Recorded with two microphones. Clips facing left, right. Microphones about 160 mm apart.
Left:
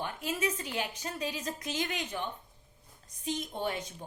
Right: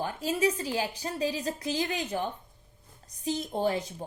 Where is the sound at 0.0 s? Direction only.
35° right (ahead or behind).